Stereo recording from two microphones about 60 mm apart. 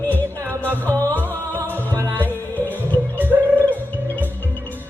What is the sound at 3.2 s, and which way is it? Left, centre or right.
Gargling, right.